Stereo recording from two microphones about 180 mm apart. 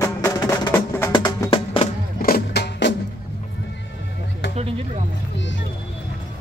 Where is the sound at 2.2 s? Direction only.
65° left (ahead or behind).